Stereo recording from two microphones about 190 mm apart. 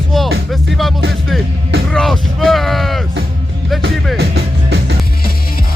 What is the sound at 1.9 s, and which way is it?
Speech, centre (ahead or behind).